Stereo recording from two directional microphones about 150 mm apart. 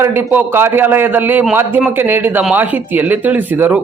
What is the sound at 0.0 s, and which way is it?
Speech, 15° right (ahead or behind).